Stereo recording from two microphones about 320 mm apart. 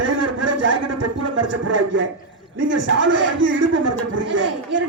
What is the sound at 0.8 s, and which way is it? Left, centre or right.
Speech, right.